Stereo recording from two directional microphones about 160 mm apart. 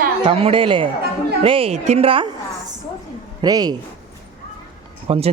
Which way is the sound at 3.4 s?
25° right (ahead or behind).